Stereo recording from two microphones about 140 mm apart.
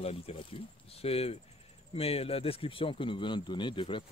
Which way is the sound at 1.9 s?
45° left (ahead or behind).